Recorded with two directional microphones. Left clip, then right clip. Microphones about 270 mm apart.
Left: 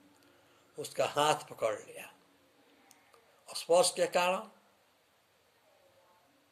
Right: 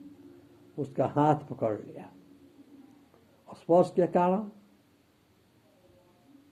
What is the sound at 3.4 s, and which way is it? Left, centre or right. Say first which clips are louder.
Speech: right 3 dB; centre.